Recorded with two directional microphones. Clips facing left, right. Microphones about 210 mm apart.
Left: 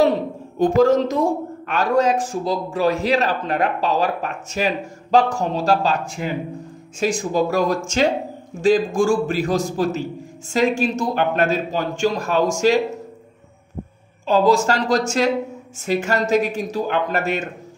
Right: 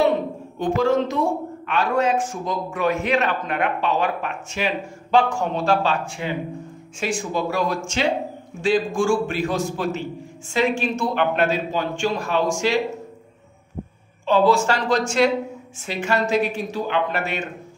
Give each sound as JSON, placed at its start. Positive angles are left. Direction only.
{"t": 0.6, "sound": "a man's voice", "side_deg": 40}
{"t": 14.2, "sound": "a man's voice", "side_deg": 40}